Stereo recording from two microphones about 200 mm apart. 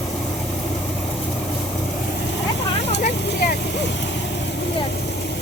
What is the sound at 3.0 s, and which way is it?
Vehicle, 50° left (ahead or behind).